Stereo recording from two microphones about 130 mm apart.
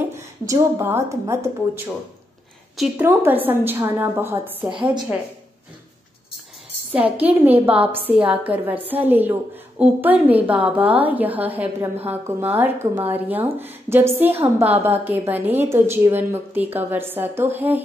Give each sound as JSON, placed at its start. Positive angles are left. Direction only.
{"t": 0.0, "sound": "a woman's voice", "side_deg": -20}
{"t": 3.0, "sound": "a woman's voice", "side_deg": -15}
{"t": 6.9, "sound": "a woman's voice", "side_deg": -10}